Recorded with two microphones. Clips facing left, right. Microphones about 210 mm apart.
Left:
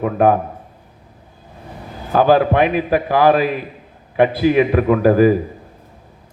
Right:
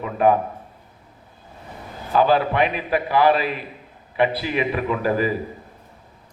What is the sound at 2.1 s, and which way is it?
A man's voice, 45° left (ahead or behind).